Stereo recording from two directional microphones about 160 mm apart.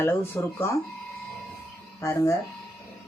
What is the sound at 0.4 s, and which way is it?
Speech, 15° left (ahead or behind).